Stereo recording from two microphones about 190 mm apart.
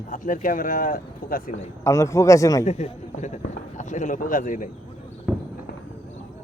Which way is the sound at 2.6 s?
40° left (ahead or behind).